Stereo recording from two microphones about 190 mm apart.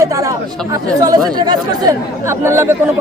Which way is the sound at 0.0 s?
15° right (ahead or behind).